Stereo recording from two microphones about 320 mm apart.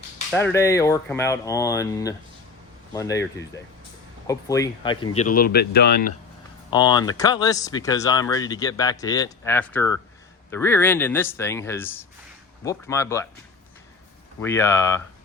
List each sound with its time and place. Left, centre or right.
0.3 s speech: centre; by 6.1 s left
6.7 s speech: centre
14.4 s speech: centre